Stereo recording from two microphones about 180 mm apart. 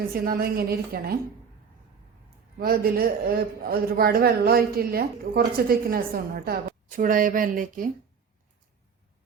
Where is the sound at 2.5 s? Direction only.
55° right (ahead or behind).